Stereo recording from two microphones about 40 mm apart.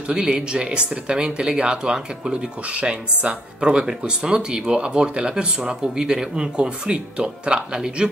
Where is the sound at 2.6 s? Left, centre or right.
Right.